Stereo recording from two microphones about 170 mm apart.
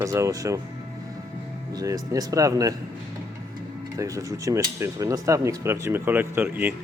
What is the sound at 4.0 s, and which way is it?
Speech, 20° right (ahead or behind).